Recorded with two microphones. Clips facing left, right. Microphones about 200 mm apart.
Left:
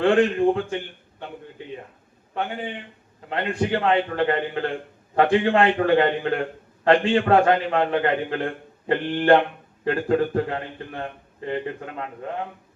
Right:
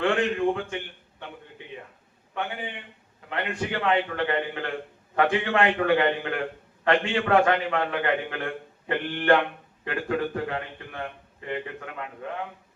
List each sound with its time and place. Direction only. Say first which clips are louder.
0.0 s a man's voice: left 6 dB; 35° left (ahead or behind)
3.2 s a man's voice: left 5 dB; 35° left (ahead or behind)